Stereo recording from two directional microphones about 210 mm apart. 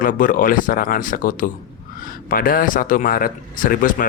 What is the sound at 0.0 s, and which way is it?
Speech, 40° left (ahead or behind).